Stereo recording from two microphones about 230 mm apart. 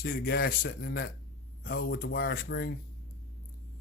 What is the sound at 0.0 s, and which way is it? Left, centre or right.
Speech, left.